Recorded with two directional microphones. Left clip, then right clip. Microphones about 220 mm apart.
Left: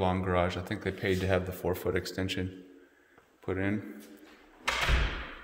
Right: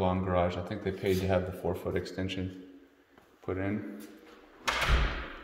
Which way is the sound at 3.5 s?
30° left (ahead or behind).